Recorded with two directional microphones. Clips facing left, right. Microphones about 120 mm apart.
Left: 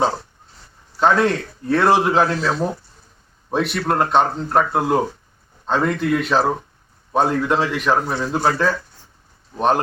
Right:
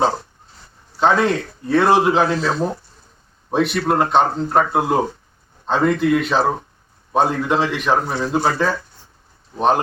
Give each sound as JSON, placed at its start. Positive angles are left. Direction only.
{"t": 1.1, "sound": "speech", "side_deg": 0}